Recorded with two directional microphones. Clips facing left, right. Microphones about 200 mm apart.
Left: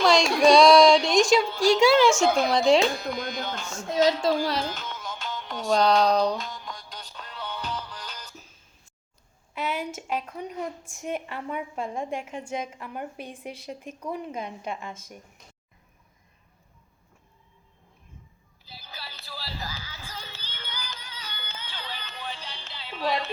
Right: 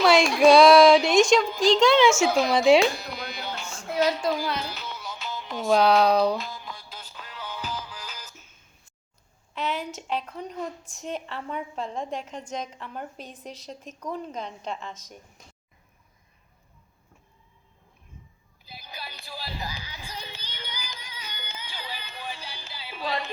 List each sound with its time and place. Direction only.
0.0 s a sound: 5° right (ahead or behind)
1.5 s a woman's voice: 10° left (ahead or behind)
2.1 s a woman's voice: 5° right (ahead or behind)
3.2 s music: 5° right (ahead or behind)
3.8 s child singing: 25° left (ahead or behind)
4.7 s music: 10° right (ahead or behind)
8.3 s a sound: 35° left (ahead or behind)
9.6 s a woman's voice: 10° left (ahead or behind)
18.6 s music: 15° right (ahead or behind)